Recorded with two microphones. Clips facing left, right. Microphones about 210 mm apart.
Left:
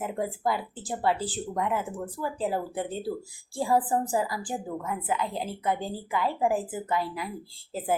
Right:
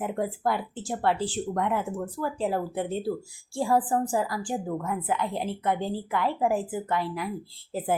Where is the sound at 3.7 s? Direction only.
20° left (ahead or behind).